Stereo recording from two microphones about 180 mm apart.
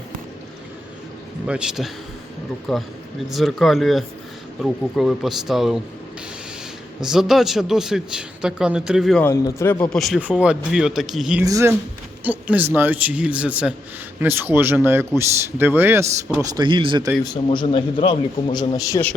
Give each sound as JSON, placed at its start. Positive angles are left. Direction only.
{"t": 1.5, "sound": "a man's voice", "side_deg": -5}
{"t": 7.0, "sound": "a man's voice", "side_deg": 0}
{"t": 9.2, "sound": "speech", "side_deg": 15}
{"t": 9.9, "sound": "a man's voice", "side_deg": 0}
{"t": 11.4, "sound": "speech", "side_deg": -20}
{"t": 17.2, "sound": "a man's voice", "side_deg": 25}